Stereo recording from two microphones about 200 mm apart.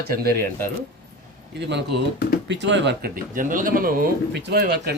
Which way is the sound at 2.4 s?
65° right (ahead or behind).